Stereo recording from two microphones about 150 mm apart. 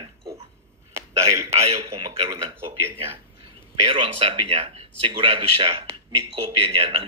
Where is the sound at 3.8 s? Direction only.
40° right (ahead or behind).